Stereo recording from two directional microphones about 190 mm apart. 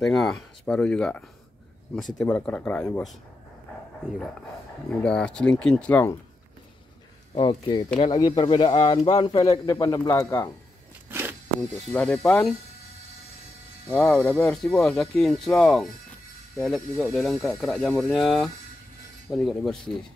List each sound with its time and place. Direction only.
0.0 s speech: centre (ahead or behind)
5.0 s speech: 5° left (ahead or behind)
7.3 s speech: 25° left (ahead or behind)
11.1 s a sound: 10° right (ahead or behind)
11.7 s speech: 10° left (ahead or behind)
13.8 s speech: 10° left (ahead or behind)